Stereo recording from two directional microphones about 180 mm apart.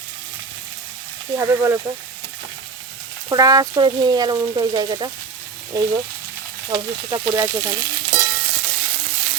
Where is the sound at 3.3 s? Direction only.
20° right (ahead or behind).